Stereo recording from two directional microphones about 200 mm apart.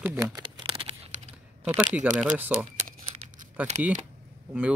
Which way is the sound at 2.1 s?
10° right (ahead or behind).